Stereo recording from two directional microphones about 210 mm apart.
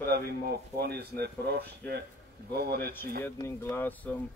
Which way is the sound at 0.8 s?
50° right (ahead or behind).